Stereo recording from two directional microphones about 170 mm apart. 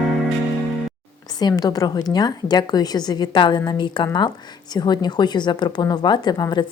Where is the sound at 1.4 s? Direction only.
25° left (ahead or behind).